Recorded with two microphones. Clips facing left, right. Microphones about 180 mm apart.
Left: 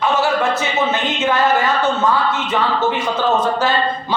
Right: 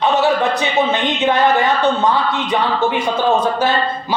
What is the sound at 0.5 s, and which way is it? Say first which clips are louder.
Speech: right 2 dB; 15° right (ahead or behind).